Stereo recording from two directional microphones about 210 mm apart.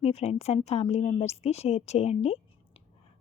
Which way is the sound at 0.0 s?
30° left (ahead or behind).